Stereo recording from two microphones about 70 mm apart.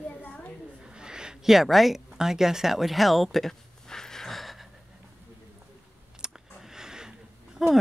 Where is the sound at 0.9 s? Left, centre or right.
Centre.